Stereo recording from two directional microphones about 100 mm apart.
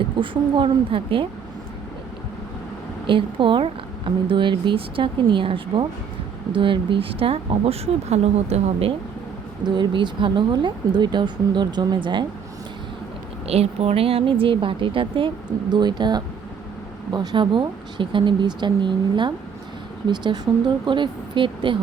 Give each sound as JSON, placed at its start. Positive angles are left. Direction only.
{"t": 0.0, "sound": "speech", "side_deg": -55}
{"t": 3.1, "sound": "speech", "side_deg": -60}
{"t": 9.6, "sound": "speech", "side_deg": -50}
{"t": 13.5, "sound": "speech", "side_deg": -90}
{"t": 15.7, "sound": "speech", "side_deg": -45}